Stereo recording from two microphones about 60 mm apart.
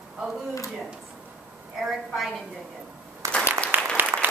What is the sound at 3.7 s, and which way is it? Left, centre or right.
Applause, right.